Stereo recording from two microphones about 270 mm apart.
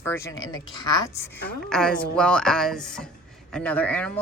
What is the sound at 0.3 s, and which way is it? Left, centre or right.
Speech, left.